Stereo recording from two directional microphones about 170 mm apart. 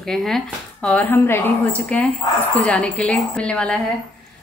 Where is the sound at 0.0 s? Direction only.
Centre (ahead or behind).